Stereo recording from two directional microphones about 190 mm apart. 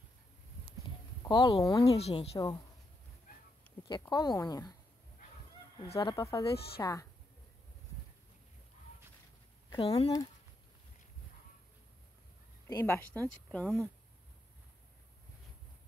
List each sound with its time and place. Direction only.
1.2 s speech: 25° left (ahead or behind)
2.0 s speech: 35° left (ahead or behind)
2.3 s speech: 20° left (ahead or behind)
4.1 s speech: 20° left (ahead or behind)
5.9 s speech: 15° left (ahead or behind)
6.5 s a woman's voice: 55° left (ahead or behind)
6.8 s speech: 20° left (ahead or behind)
9.8 s speech: 30° left (ahead or behind)
12.6 s speech: 15° left (ahead or behind)
13.5 s speech: centre (ahead or behind)